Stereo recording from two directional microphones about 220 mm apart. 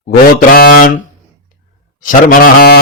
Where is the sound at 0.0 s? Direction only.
40° left (ahead or behind).